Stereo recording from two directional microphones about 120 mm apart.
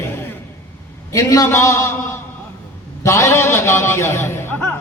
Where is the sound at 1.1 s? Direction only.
25° left (ahead or behind).